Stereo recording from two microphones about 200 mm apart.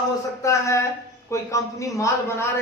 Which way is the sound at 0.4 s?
15° left (ahead or behind).